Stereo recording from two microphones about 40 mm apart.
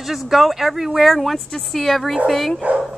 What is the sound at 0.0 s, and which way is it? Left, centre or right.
A woman's voice, centre.